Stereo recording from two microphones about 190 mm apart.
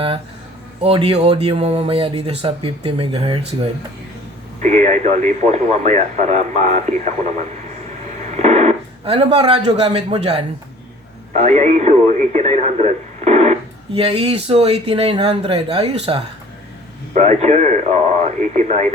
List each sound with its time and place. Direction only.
0.8 s speech: 30° right (ahead or behind)
8.0 s a sound: 35° right (ahead or behind)
11.3 s speech: 35° right (ahead or behind)